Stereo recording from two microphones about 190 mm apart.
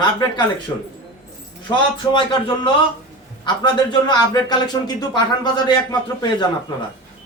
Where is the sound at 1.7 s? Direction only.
25° left (ahead or behind).